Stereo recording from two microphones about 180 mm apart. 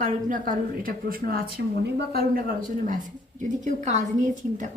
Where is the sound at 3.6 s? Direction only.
40° right (ahead or behind).